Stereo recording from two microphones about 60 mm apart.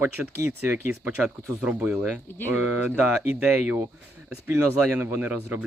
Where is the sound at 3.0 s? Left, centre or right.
Right.